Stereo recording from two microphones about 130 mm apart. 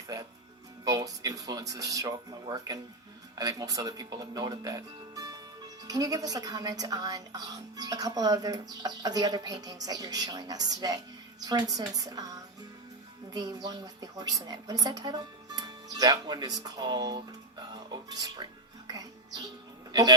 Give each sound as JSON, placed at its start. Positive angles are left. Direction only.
{"t": 0.9, "sound": "speech", "side_deg": -30}
{"t": 13.3, "sound": "a woman's voice", "side_deg": -30}
{"t": 18.9, "sound": "music", "side_deg": -30}
{"t": 19.9, "sound": "a man's voice", "side_deg": -30}